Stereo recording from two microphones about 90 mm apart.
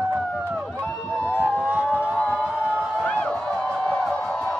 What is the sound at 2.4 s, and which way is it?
Crowd, 15° right (ahead or behind).